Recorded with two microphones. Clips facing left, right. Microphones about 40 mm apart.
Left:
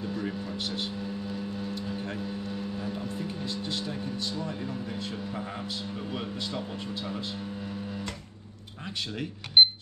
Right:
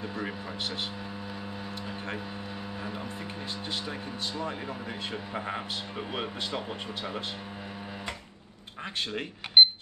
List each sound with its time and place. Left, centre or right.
0.0 s vehicle: centre
1.3 s speech: centre
9.6 s a sound: centre